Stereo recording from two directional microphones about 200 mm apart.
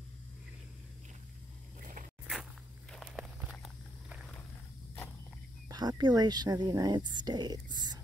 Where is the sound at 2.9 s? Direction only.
Centre (ahead or behind).